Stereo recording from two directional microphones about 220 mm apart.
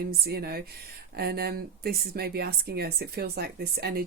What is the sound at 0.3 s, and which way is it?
Speech, 45° right (ahead or behind).